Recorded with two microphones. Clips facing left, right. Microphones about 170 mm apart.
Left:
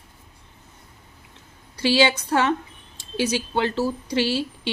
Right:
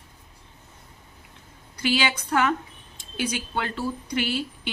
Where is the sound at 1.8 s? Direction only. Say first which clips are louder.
Left 6 dB; 30° left (ahead or behind).